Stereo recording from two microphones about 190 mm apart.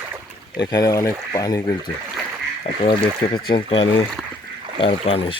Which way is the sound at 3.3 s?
25° left (ahead or behind).